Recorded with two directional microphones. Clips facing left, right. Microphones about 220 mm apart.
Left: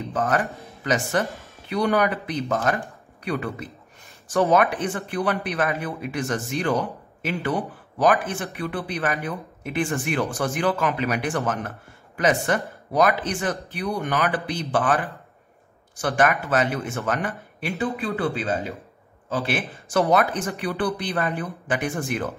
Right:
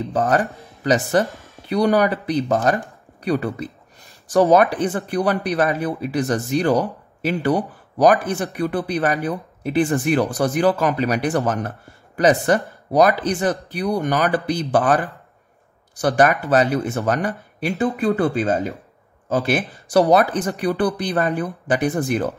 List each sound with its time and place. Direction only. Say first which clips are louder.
0.1 s speech: right 4 dB; 35° right (ahead or behind)
1.2 s a woman's voice: right 3 dB; centre (ahead or behind)
1.7 s speech: right 4 dB; 35° right (ahead or behind)
16.0 s speech: right 5 dB; 35° right (ahead or behind)